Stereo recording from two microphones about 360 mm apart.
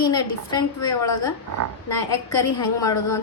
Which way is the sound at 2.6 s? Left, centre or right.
Centre.